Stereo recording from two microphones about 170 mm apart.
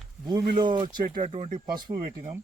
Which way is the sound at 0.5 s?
25° right (ahead or behind).